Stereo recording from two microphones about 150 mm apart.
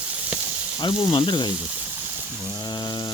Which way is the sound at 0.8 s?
30° left (ahead or behind).